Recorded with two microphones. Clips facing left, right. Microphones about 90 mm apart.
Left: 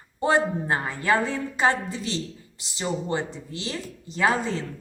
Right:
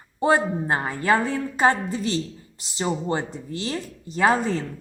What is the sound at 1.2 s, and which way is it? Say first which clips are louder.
Speech: right 3 dB; 40° right (ahead or behind).